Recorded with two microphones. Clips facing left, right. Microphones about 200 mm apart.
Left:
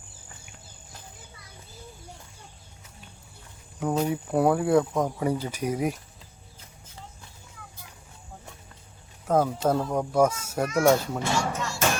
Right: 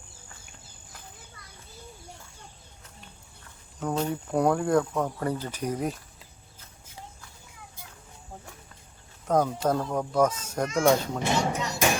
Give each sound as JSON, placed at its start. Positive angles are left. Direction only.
{"t": 3.8, "sound": "speech", "side_deg": 10}
{"t": 9.2, "sound": "speech", "side_deg": 5}
{"t": 11.2, "sound": "speech", "side_deg": -20}